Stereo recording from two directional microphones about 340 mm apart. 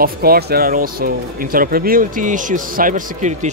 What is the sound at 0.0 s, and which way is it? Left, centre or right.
Speech, right.